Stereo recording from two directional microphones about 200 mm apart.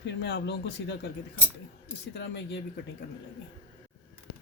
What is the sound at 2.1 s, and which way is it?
Speech, 60° left (ahead or behind).